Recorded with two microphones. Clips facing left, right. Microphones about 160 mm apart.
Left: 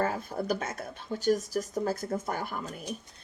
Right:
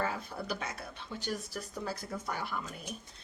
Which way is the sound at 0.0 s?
45° left (ahead or behind).